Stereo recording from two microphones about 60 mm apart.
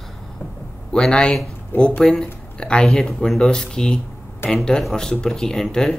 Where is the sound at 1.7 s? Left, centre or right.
Left.